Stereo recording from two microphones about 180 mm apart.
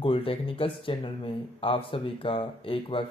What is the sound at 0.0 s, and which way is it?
Speech, 30° left (ahead or behind).